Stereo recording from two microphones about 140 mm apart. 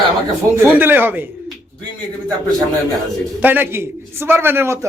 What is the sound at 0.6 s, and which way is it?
Speech, 15° right (ahead or behind).